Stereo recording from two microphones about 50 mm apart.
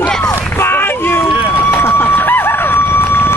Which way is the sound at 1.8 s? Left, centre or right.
Left.